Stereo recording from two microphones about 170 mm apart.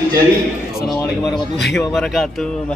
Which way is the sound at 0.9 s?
15° left (ahead or behind).